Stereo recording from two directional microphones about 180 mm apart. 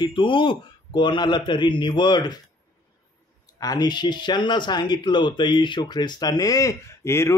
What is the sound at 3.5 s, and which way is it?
Speech, 20° left (ahead or behind).